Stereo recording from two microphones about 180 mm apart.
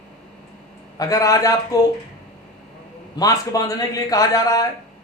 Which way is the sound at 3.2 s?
20° left (ahead or behind).